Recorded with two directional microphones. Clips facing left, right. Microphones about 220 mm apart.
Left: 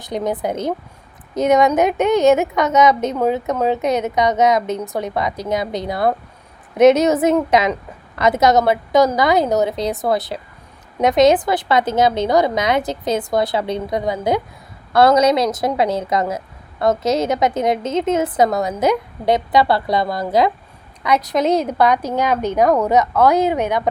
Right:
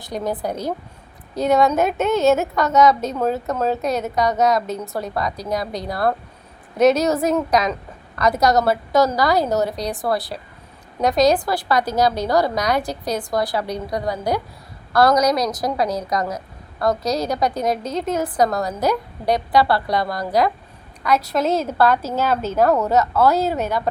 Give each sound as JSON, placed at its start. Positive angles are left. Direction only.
{"t": 0.0, "sound": "a woman's voice", "side_deg": 20}